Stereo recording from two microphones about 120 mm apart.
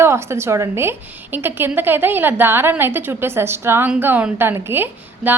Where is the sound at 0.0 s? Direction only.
20° right (ahead or behind).